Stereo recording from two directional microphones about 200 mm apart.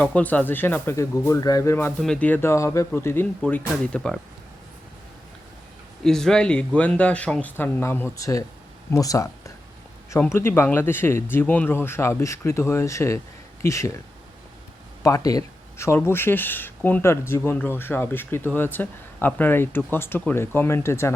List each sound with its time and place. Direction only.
0.0 s speech: 5° left (ahead or behind)
6.0 s speech: centre (ahead or behind)
15.0 s speech: 15° left (ahead or behind)